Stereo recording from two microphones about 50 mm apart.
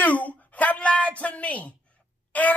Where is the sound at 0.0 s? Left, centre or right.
Left.